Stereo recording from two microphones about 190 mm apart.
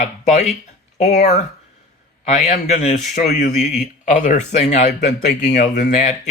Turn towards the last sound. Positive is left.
turn(degrees=40)  # may be behind; listen again after turning